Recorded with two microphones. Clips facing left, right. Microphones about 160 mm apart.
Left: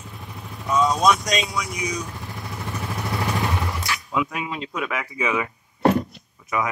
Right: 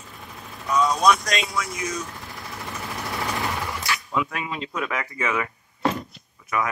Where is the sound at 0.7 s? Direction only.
Centre (ahead or behind).